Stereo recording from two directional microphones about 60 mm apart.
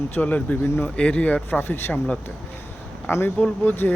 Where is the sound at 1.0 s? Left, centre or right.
Centre; by 2.0 s left.